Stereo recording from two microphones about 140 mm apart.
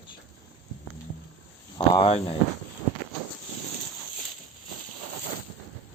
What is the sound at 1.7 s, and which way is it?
Speech, 35° left (ahead or behind).